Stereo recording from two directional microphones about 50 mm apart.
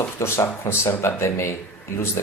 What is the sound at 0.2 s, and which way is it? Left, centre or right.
Speech, left.